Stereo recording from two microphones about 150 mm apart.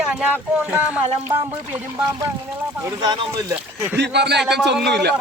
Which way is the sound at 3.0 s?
25° right (ahead or behind).